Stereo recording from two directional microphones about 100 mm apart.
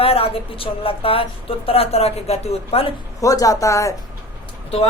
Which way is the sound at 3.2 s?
35° left (ahead or behind).